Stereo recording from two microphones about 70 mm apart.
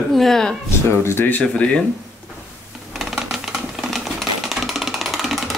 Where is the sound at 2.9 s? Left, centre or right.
Centre.